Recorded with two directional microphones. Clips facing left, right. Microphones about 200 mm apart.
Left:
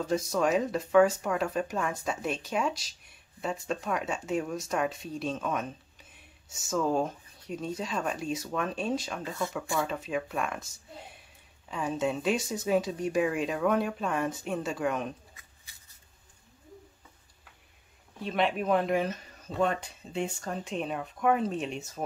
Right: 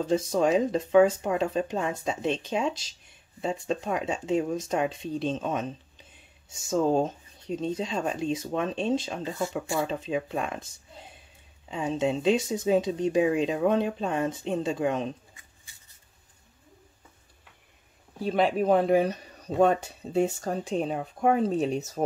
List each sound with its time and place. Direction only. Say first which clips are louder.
0.0 s speech: right 3 dB; 25° right (ahead or behind)
11.7 s speech: right 3 dB; 25° right (ahead or behind)
18.2 s speech: right 5 dB; 35° right (ahead or behind)